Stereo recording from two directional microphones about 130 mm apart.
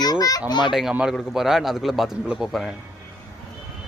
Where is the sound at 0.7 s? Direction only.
5° right (ahead or behind).